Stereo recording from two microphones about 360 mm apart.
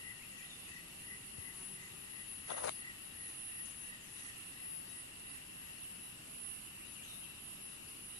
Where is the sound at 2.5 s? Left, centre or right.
Left.